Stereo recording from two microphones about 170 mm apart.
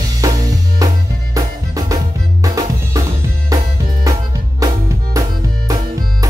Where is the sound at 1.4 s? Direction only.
20° right (ahead or behind).